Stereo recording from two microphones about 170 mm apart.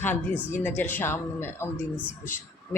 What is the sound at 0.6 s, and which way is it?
A woman's voice, 10° left (ahead or behind).